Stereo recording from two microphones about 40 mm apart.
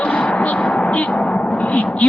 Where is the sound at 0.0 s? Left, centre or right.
Left.